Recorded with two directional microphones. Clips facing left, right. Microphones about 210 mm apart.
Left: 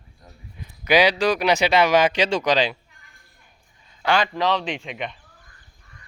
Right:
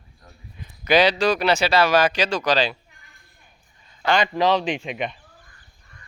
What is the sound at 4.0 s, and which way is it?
Speech, 10° left (ahead or behind).